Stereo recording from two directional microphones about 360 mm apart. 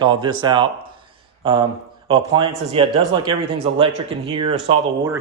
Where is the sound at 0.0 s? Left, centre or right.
Centre.